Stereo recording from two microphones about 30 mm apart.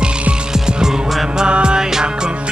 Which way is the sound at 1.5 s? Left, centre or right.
Right.